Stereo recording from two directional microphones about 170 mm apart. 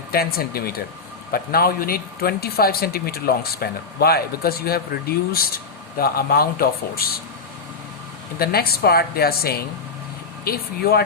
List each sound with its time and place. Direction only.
0.1 s speech: 65° left (ahead or behind)
8.4 s speech: 65° left (ahead or behind)